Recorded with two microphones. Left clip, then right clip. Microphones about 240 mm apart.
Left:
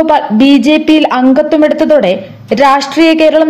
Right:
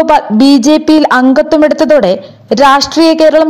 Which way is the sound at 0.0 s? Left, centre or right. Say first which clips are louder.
Right 1 dB; right.